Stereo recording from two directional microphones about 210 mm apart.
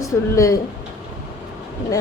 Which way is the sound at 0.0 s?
15° left (ahead or behind).